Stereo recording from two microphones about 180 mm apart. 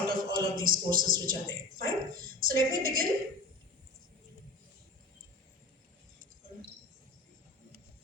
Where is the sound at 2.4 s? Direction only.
55° right (ahead or behind).